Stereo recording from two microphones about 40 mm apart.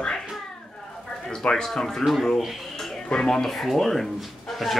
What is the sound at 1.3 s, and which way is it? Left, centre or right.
Speech, centre.